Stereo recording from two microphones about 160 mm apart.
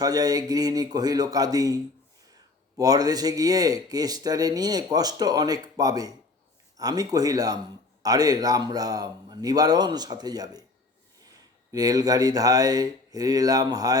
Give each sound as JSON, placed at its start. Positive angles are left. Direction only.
{"t": 0.0, "sound": "speech", "side_deg": -25}
{"t": 11.7, "sound": "speech", "side_deg": -25}